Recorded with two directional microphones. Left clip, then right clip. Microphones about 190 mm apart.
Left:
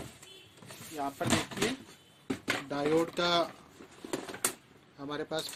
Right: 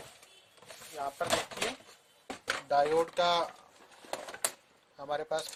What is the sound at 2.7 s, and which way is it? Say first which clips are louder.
Speech: right 4 dB; 50° right (ahead or behind).